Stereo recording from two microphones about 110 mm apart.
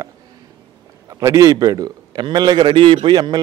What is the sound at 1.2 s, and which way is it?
A man's voice, 30° right (ahead or behind).